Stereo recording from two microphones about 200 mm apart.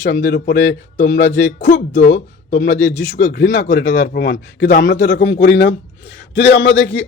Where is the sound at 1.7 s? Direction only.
40° left (ahead or behind).